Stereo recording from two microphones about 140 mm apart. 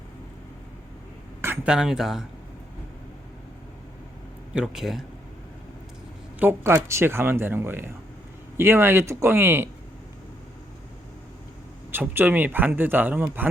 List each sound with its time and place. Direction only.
1.6 s speech: 5° right (ahead or behind)
4.5 s speech: 5° right (ahead or behind)
6.4 s speech: 15° right (ahead or behind)
11.9 s speech: 15° right (ahead or behind)